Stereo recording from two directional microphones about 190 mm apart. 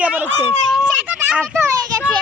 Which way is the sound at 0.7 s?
5° right (ahead or behind).